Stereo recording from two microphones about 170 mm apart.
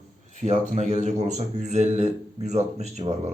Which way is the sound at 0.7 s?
45° right (ahead or behind).